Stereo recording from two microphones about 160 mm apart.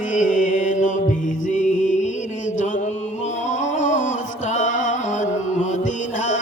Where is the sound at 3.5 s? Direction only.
50° left (ahead or behind).